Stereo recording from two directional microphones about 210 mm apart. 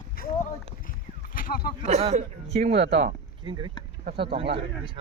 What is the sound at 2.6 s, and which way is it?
Speech, 45° right (ahead or behind).